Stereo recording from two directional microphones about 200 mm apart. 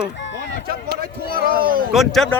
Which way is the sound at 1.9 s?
Centre (ahead or behind).